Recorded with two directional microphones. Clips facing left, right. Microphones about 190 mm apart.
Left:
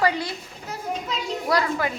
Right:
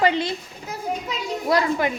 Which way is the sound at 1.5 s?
20° right (ahead or behind).